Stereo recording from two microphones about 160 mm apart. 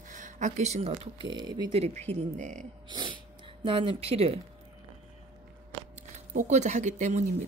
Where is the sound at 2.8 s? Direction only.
30° right (ahead or behind).